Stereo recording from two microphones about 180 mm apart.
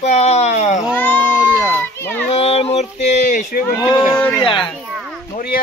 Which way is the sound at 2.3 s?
35° left (ahead or behind).